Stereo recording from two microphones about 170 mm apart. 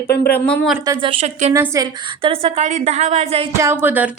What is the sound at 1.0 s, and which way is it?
Speech, 35° right (ahead or behind).